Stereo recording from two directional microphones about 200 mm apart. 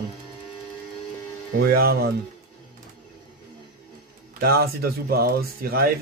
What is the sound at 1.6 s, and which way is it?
Speech, 50° right (ahead or behind).